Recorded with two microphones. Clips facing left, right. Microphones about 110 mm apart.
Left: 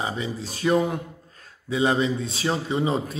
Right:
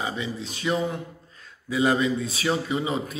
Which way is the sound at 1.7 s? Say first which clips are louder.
Even; 25° left (ahead or behind).